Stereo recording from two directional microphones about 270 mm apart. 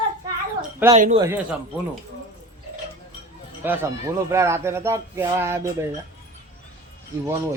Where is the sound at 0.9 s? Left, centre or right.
Right.